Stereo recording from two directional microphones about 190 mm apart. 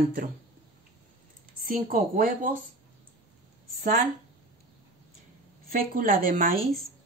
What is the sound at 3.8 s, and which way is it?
Speech, 40° right (ahead or behind).